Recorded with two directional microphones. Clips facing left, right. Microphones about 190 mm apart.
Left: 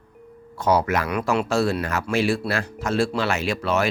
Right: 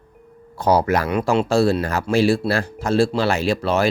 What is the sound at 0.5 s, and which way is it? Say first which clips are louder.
Speech: right 3 dB; 35° right (ahead or behind).